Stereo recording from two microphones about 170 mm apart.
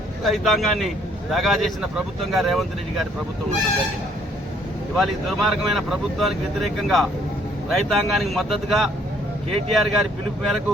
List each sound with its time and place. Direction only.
0.3 s speech: centre (ahead or behind)
4.9 s speech: centre (ahead or behind)